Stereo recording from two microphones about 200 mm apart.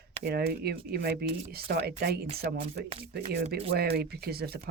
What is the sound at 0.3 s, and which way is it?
Speech, 50° right (ahead or behind).